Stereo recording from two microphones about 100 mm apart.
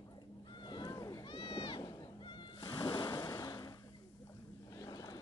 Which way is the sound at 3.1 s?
35° left (ahead or behind).